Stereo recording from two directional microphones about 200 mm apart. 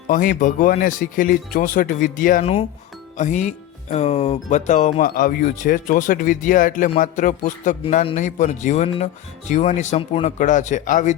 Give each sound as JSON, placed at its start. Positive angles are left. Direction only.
{"t": 0.1, "sound": "speech", "side_deg": 40}